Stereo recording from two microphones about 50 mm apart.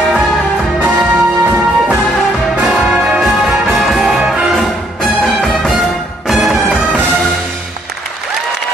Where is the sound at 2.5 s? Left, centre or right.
Centre.